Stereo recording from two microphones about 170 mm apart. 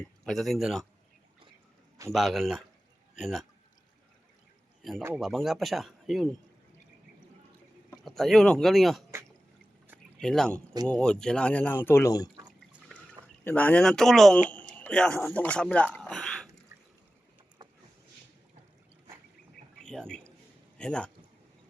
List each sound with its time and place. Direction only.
0.0 s speech: centre (ahead or behind)
2.1 s speech: centre (ahead or behind)
4.8 s speech: centre (ahead or behind)
7.9 s speech: centre (ahead or behind)
10.2 s speech: 5° left (ahead or behind); by 12.3 s 20° left (ahead or behind)
13.4 s speech: 10° left (ahead or behind)
17.6 s a sound: 25° right (ahead or behind)
19.8 s a sound: 5° left (ahead or behind)
20.7 s a man's voice: 5° left (ahead or behind)